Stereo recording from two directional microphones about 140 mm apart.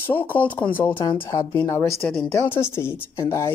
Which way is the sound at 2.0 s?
Centre (ahead or behind).